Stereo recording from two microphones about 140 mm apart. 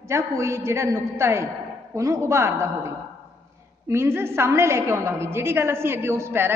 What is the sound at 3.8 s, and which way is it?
A woman's voice, 20° right (ahead or behind).